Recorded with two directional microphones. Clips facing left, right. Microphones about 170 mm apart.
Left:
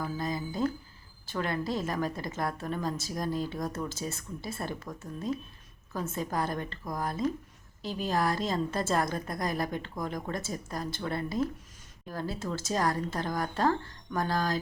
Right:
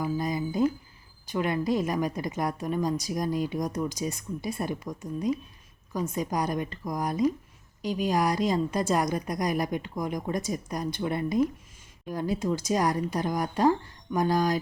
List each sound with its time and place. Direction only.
0.0 s a woman's voice: 15° right (ahead or behind)